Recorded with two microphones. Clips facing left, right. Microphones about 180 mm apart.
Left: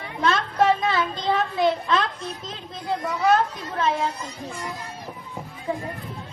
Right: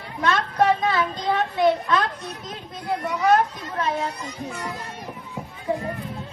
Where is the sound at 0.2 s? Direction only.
25° left (ahead or behind).